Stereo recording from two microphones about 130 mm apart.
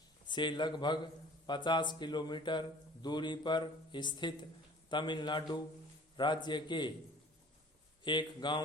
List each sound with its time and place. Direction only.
0.3 s a man's voice: 35° left (ahead or behind)
8.0 s a man's voice: 35° left (ahead or behind)